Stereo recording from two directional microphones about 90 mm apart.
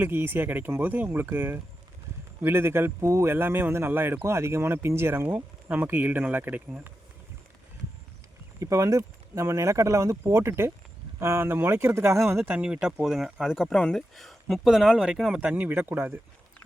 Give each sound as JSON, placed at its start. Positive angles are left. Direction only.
{"t": 0.0, "sound": "speech", "side_deg": -25}
{"t": 8.5, "sound": "speech", "side_deg": -35}
{"t": 12.5, "sound": "speech", "side_deg": -10}
{"t": 13.7, "sound": "speech", "side_deg": 5}